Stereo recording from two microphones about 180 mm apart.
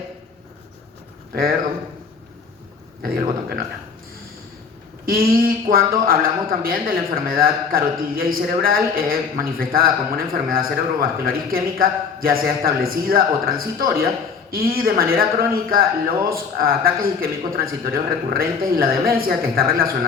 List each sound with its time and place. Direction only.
3.0 s speech: 55° right (ahead or behind)
5.0 s speech: 55° right (ahead or behind)